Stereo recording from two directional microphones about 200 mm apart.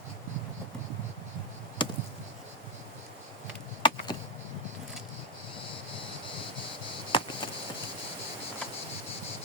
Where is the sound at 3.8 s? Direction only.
25° left (ahead or behind).